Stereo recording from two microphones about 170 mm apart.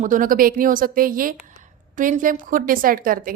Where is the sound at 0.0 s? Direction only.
50° right (ahead or behind).